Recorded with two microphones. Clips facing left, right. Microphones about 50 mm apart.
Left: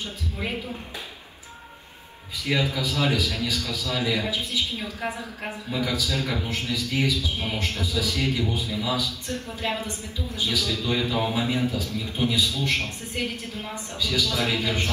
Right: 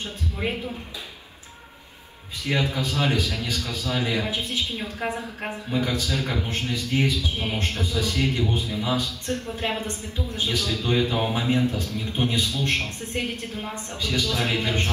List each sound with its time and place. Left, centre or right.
2.5 s a man's voice: right
5.0 s a woman's voice: right
5.7 s a man's voice: right
6.5 s a man's voice: right
11.1 s a man's voice: right
11.7 s a man's voice: right